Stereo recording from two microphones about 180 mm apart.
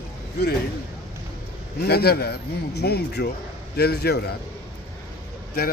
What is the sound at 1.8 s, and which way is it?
Speech, 60° left (ahead or behind).